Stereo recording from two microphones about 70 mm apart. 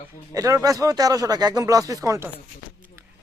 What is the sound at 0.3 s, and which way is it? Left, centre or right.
Speech, right.